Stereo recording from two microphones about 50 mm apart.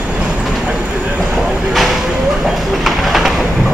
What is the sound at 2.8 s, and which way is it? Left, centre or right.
Bird, centre.